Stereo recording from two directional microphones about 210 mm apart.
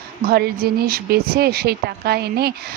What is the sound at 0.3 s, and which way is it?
Speech, 50° right (ahead or behind).